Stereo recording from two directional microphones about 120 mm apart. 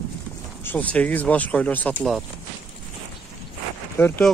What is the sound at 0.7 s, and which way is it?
Speech, 15° left (ahead or behind).